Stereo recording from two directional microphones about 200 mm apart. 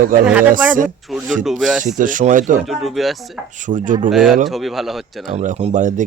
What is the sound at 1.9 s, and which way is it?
Speech, 40° right (ahead or behind).